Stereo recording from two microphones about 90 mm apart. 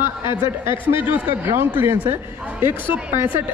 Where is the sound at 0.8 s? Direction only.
20° right (ahead or behind).